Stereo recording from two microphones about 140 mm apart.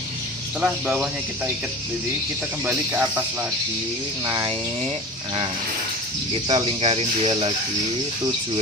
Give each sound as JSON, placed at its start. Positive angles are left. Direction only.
{"t": 0.6, "sound": "speech", "side_deg": -10}
{"t": 2.6, "sound": "speech", "side_deg": -15}
{"t": 4.3, "sound": "speech", "side_deg": -30}
{"t": 6.3, "sound": "speech", "side_deg": -40}